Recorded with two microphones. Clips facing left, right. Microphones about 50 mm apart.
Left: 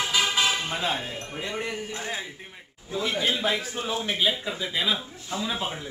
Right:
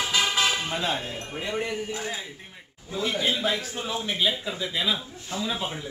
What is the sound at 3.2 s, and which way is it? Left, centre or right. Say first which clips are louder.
A man's voice: left 1 dB; centre.